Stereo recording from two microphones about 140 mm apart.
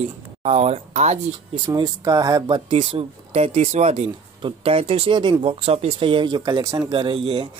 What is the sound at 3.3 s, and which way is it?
Speech, 55° right (ahead or behind).